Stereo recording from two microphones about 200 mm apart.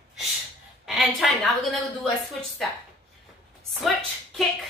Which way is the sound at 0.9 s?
Centre (ahead or behind).